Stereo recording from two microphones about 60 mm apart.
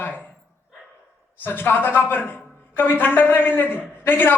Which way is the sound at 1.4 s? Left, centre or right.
Left.